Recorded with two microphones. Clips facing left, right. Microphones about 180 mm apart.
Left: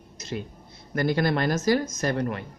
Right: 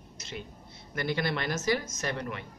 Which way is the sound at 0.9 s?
45° left (ahead or behind).